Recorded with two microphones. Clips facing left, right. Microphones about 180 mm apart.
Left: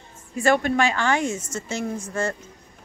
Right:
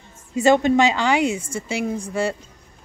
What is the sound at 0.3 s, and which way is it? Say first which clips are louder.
A woman's voice: right 5 dB; 20° right (ahead or behind).